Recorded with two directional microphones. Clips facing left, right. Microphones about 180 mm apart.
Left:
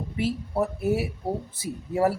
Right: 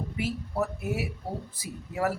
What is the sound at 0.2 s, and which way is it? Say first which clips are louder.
A man's voice: left 4 dB; 30° left (ahead or behind).